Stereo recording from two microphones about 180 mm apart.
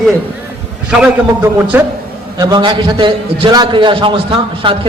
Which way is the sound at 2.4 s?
25° right (ahead or behind).